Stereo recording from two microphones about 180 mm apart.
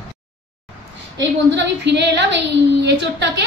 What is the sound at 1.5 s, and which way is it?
A woman's voice, 75° right (ahead or behind).